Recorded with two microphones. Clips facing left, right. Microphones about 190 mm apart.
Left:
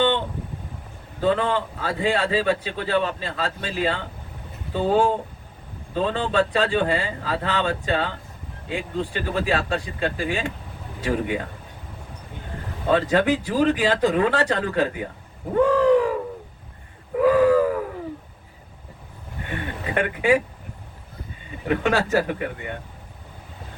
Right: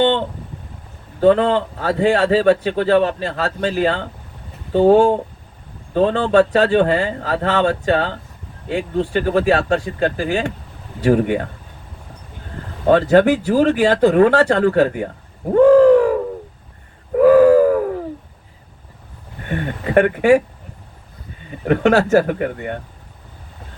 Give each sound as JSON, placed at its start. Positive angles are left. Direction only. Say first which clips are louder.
{"t": 1.2, "sound": "a man's voice", "louder": "right 8 dB", "side_deg": -45}
{"t": 12.9, "sound": "a man's voice", "louder": "right 7 dB", "side_deg": -45}
{"t": 15.5, "sound": "bird", "louder": "right 8 dB", "side_deg": -45}
{"t": 17.2, "sound": "a sound", "louder": "right 7 dB", "side_deg": -45}
{"t": 19.5, "sound": "a man's voice", "louder": "right 7 dB", "side_deg": -50}
{"t": 21.6, "sound": "a man's voice", "louder": "right 7 dB", "side_deg": -50}